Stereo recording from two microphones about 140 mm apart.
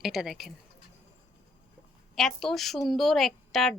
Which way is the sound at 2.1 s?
Centre (ahead or behind).